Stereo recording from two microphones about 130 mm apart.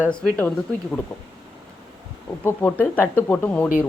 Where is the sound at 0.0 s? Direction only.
5° left (ahead or behind).